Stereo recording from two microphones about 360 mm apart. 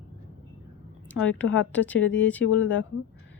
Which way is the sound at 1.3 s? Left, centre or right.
Left.